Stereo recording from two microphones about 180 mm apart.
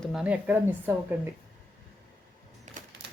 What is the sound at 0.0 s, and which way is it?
Speech, 5° right (ahead or behind).